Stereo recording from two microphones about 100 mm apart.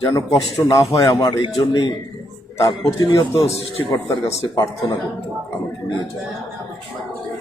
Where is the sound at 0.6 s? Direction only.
45° left (ahead or behind).